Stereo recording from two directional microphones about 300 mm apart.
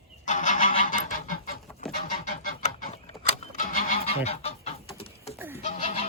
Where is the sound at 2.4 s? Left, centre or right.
Left.